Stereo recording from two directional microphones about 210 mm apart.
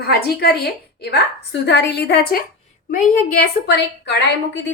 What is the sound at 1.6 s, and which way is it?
A woman's voice, 55° left (ahead or behind).